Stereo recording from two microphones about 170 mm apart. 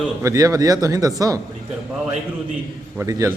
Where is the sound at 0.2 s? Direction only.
20° right (ahead or behind).